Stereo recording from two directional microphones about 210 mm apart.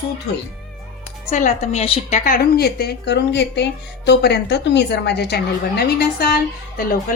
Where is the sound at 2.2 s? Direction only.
45° left (ahead or behind).